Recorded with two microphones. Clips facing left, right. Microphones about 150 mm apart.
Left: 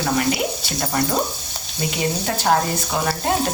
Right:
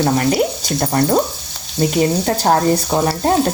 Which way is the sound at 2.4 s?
35° right (ahead or behind).